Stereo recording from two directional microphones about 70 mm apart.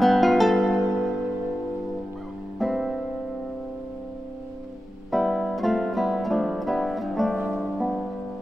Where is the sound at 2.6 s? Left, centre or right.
Centre.